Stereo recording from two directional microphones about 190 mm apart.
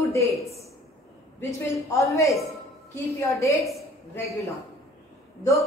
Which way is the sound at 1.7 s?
15° left (ahead or behind).